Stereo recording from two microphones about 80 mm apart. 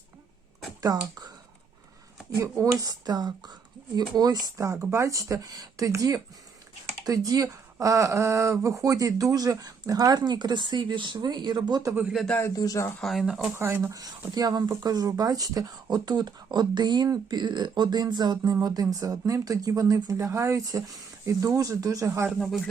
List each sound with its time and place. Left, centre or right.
0.8 s speech: right
2.4 s speech: right
4.5 s speech: right
12.5 s speech: left
13.0 s speech: centre
13.6 s speech: right
13.9 s speech: right
20.7 s speech: right
22.4 s speech: centre